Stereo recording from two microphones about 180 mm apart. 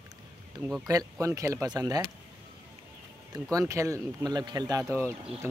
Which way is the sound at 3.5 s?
15° right (ahead or behind).